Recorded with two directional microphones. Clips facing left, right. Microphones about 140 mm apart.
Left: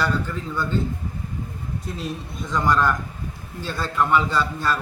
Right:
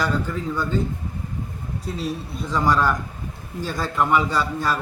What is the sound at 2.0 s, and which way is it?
A man's voice, 5° right (ahead or behind).